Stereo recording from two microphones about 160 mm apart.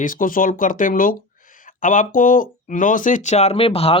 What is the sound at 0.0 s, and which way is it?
Speech, 55° left (ahead or behind).